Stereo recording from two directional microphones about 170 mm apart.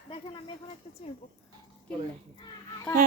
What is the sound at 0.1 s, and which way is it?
Speech, 35° left (ahead or behind).